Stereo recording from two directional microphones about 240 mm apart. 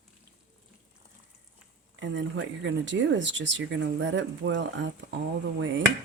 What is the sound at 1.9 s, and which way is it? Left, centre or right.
Speech, right.